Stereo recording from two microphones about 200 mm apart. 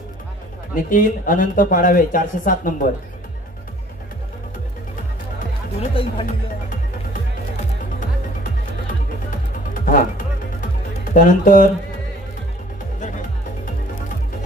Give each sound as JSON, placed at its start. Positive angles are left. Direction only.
{"t": 0.8, "sound": "speech", "side_deg": 40}
{"t": 5.8, "sound": "speech", "side_deg": 25}
{"t": 9.8, "sound": "music", "side_deg": 40}
{"t": 11.1, "sound": "speech", "side_deg": 40}